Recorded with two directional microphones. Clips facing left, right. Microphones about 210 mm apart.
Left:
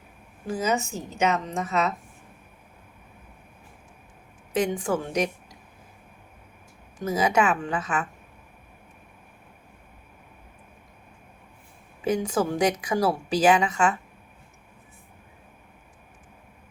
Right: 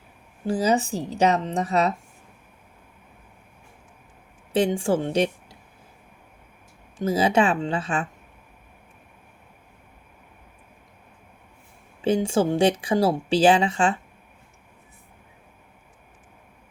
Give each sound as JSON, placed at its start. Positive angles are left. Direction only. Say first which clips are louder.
{"t": 0.4, "sound": "a woman's voice", "louder": "right 4 dB", "side_deg": -35}
{"t": 4.5, "sound": "speech", "louder": "right 4 dB", "side_deg": -30}
{"t": 7.0, "sound": "speech", "louder": "right 3 dB", "side_deg": -30}
{"t": 12.0, "sound": "speech", "louder": "right 3 dB", "side_deg": -30}